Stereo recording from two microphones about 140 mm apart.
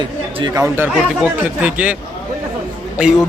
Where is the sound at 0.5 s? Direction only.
20° right (ahead or behind).